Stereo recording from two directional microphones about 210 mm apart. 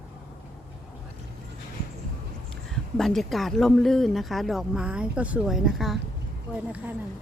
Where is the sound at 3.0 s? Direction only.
Centre (ahead or behind).